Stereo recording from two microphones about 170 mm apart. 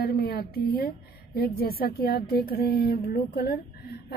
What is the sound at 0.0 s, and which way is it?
A woman's voice, 65° left (ahead or behind).